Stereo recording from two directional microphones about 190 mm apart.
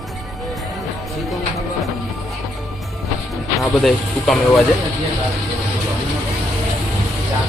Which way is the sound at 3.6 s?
Centre (ahead or behind).